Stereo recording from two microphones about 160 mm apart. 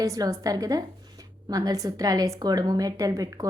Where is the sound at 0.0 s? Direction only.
20° right (ahead or behind).